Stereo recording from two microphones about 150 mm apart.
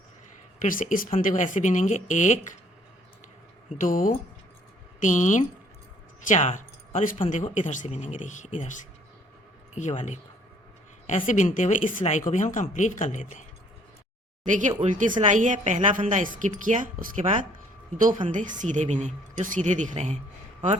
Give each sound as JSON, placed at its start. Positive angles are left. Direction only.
{"t": 0.6, "sound": "speech", "side_deg": 65}
{"t": 3.8, "sound": "speech", "side_deg": 65}
{"t": 7.3, "sound": "speech", "side_deg": 50}
{"t": 14.8, "sound": "a woman's voice", "side_deg": -60}